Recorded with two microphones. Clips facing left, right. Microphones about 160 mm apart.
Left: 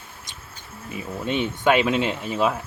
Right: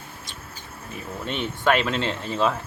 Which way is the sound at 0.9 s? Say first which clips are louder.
Left 5 dB; 15° left (ahead or behind).